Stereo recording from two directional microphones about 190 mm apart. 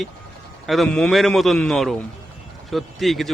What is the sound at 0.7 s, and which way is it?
Speech, centre (ahead or behind).